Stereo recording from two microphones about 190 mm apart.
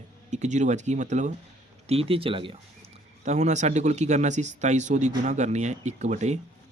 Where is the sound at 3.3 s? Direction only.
35° right (ahead or behind).